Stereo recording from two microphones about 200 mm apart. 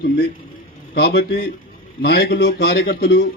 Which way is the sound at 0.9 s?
55° left (ahead or behind).